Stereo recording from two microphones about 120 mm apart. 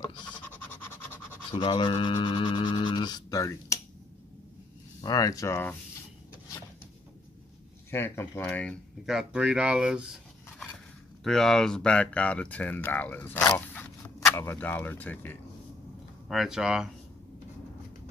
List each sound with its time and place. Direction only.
0.5 s pant: 15° left (ahead or behind)
1.5 s speech: 45° left (ahead or behind); by 3.8 s 25° left (ahead or behind)
5.0 s speech: 30° left (ahead or behind)
7.9 s speech: 20° left (ahead or behind)
9.0 s speech: 5° right (ahead or behind)
11.2 s speech: 5° left (ahead or behind)
16.3 s speech: 5° right (ahead or behind)